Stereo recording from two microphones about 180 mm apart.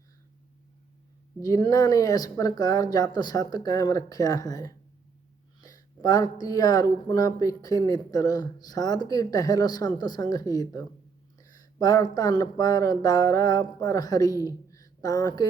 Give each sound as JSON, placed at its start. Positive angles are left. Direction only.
{"t": 1.4, "sound": "speech", "side_deg": 20}